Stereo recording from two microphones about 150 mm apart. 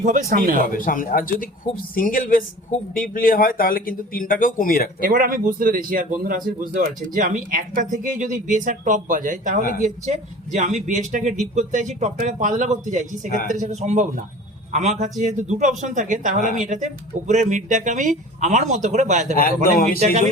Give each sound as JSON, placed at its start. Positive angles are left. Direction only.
{"t": 0.0, "sound": "a man's voice", "side_deg": -65}
{"t": 0.6, "sound": "speech", "side_deg": 65}
{"t": 4.9, "sound": "a man's voice", "side_deg": -70}